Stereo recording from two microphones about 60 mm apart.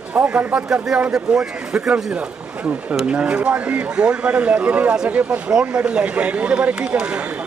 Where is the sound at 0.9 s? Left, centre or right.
Centre.